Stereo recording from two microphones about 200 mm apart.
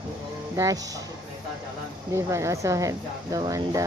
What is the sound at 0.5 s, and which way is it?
Speech, 15° right (ahead or behind).